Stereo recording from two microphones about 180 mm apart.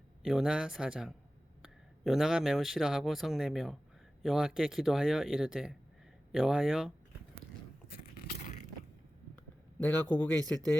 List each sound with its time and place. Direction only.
0.2 s speech: 5° right (ahead or behind)
8.1 s a sound: 40° left (ahead or behind)
9.7 s a man's voice: 10° left (ahead or behind)